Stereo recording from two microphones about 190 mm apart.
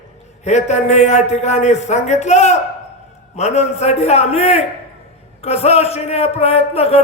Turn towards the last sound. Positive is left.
turn(degrees=35)  # may be behind; listen again after turning